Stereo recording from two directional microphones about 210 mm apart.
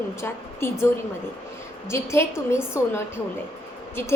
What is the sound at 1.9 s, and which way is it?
Speech, 10° left (ahead or behind).